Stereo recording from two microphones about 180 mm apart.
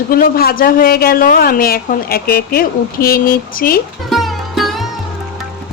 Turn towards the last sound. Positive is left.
turn(degrees=0)  # may be behind; listen again after turning